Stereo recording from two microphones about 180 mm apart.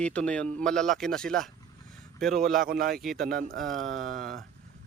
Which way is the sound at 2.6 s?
55° right (ahead or behind).